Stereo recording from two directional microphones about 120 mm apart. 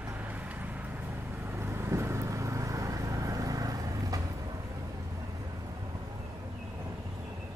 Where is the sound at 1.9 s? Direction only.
20° right (ahead or behind).